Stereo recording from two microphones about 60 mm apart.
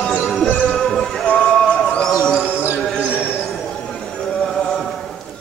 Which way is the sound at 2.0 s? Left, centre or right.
Centre.